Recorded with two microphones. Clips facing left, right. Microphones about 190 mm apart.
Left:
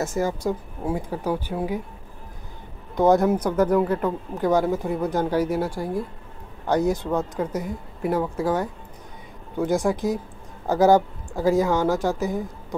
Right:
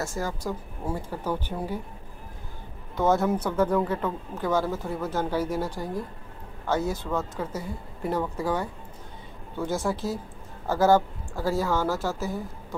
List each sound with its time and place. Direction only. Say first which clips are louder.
0.0 s speech: left 6 dB; 20° left (ahead or behind)
3.0 s speech: left 5 dB; 15° left (ahead or behind)
9.6 s speech: left 6 dB; 15° left (ahead or behind)